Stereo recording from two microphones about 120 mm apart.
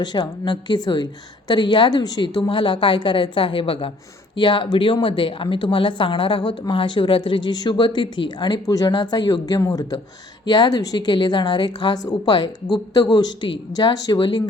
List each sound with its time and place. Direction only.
0.0 s a woman's voice: 40° left (ahead or behind)